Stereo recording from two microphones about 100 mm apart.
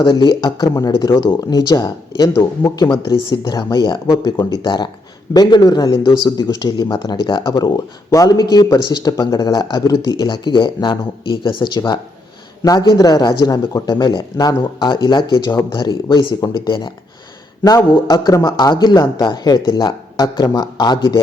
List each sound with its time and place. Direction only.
0.0 s speech: 50° left (ahead or behind)
12.6 s speech: 40° left (ahead or behind)
17.9 s speech: 45° left (ahead or behind)